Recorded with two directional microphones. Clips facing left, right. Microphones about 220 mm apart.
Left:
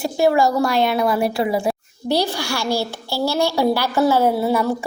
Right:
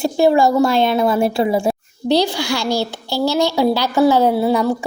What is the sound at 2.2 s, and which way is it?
Speech, 15° right (ahead or behind).